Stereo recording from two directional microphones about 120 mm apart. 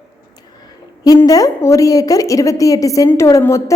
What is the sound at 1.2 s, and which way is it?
A woman's voice, 30° left (ahead or behind).